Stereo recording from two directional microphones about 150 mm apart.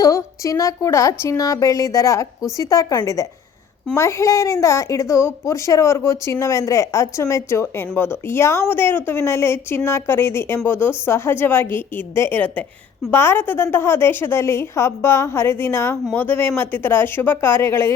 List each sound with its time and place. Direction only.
0.0 s a woman's voice: 20° left (ahead or behind)